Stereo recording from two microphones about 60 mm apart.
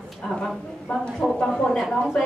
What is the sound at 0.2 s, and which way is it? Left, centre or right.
Speech, centre.